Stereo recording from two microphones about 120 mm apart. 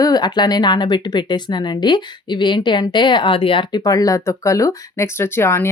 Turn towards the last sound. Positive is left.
turn(degrees=20)  # may be behind; listen again after turning